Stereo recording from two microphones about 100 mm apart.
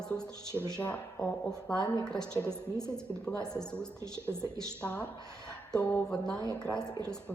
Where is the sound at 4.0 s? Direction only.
25° right (ahead or behind).